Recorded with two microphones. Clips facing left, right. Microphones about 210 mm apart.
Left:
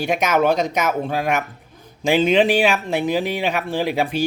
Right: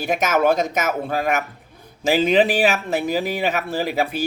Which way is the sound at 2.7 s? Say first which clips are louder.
Left 1 dB; 45° right (ahead or behind).